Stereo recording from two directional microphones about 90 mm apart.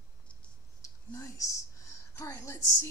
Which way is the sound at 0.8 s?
35° left (ahead or behind).